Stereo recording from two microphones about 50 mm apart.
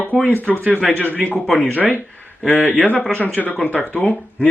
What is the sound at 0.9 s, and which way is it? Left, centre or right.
Speech, left.